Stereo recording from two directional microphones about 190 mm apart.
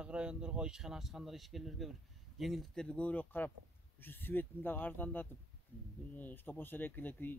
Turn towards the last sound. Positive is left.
turn(degrees=10)  # may be behind; listen again after turning